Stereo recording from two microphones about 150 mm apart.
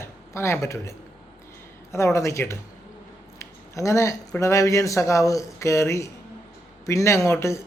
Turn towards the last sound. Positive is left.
turn(degrees=20)  # may be behind; listen again after turning